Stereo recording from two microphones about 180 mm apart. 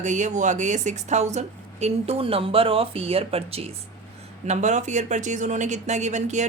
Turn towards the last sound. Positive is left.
turn(degrees=-40)  # may be behind; listen again after turning